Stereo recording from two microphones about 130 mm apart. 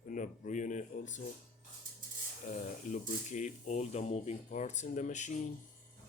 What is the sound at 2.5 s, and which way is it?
Speech, 60° left (ahead or behind).